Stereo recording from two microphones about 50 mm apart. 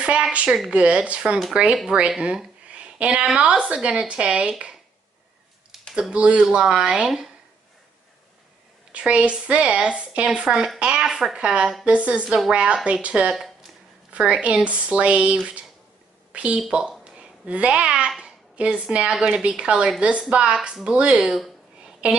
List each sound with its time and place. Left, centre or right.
0.0 s a sound: right
0.7 s a woman's voice: right
5.9 s a woman's voice: right
8.9 s a woman's voice: right
10.8 s a sound: centre
11.1 s speech: centre
11.3 s a woman's voice: right
13.3 s a sound: centre
14.1 s a woman's voice: right
17.0 s babbling: right
18.2 s a sound: centre
19.2 s a woman's voice: centre
22.0 s a woman's voice: right